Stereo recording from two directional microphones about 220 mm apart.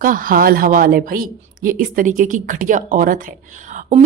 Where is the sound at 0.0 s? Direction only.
40° right (ahead or behind).